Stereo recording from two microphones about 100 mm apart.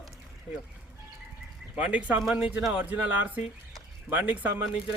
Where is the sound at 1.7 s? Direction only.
15° right (ahead or behind).